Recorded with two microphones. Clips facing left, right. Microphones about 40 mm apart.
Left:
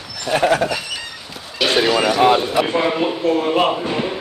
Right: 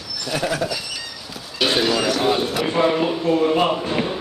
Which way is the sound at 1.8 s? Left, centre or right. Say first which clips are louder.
Left 3 dB; left.